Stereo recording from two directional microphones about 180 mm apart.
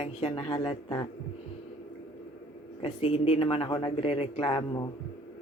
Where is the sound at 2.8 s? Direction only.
30° left (ahead or behind).